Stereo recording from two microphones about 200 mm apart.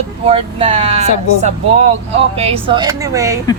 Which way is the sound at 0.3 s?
30° right (ahead or behind).